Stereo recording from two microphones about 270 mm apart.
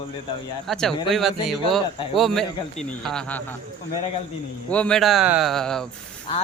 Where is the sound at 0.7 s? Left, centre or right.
Centre.